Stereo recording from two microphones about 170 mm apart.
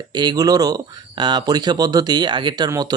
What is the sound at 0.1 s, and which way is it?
Speech, 25° right (ahead or behind).